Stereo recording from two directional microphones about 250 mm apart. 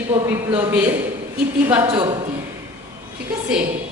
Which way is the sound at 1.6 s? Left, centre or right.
Centre.